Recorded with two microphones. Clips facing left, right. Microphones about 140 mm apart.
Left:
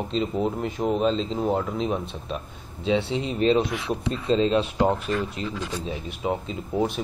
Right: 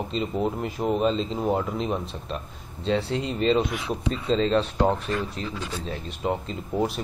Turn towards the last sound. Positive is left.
turn(degrees=0)  # may be behind; listen again after turning